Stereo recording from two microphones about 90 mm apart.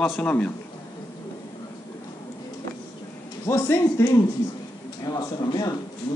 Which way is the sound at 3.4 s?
25° left (ahead or behind).